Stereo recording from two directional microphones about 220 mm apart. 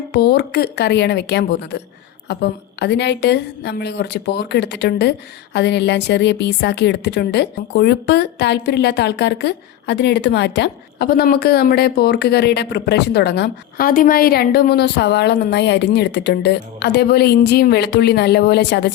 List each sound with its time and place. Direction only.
0.1 s a woman's voice: 45° left (ahead or behind)